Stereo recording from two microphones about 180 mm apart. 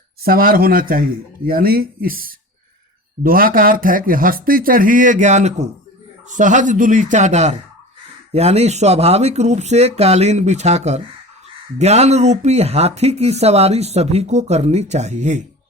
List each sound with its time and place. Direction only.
0.2 s speech: 55° right (ahead or behind)